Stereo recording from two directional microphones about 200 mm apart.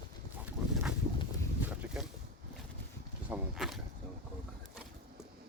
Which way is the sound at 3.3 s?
Centre (ahead or behind).